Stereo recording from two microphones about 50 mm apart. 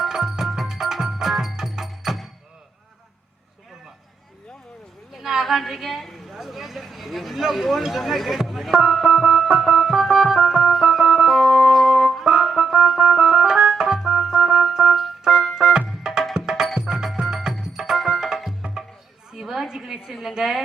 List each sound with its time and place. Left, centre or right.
0.0 s music: centre
5.1 s speech: centre
9.0 s music: centre
18.6 s music: right
19.3 s a sound: centre
20.1 s a woman's voice: centre